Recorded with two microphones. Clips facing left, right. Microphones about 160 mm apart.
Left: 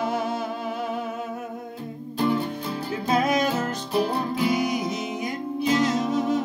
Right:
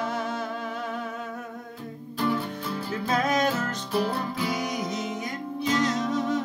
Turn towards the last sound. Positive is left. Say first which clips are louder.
# left 3 dB
turn(degrees=10)  # may be behind; listen again after turning